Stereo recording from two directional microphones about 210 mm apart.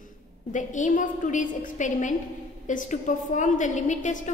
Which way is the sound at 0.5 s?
35° left (ahead or behind).